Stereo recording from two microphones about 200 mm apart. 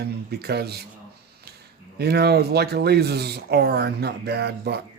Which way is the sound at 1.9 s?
55° right (ahead or behind).